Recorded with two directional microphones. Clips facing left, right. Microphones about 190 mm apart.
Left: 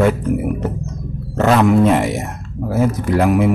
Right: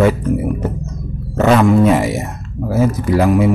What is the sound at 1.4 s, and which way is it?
Speech, centre (ahead or behind).